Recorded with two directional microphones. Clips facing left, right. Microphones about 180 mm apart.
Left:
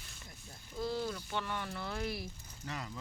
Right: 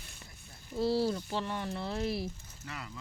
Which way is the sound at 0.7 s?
35° right (ahead or behind).